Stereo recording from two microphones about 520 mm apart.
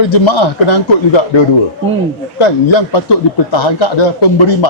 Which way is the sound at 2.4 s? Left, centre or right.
Left.